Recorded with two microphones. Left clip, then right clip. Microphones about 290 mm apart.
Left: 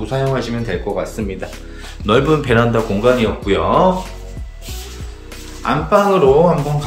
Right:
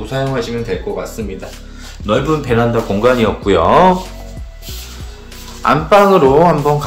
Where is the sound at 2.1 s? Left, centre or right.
Centre.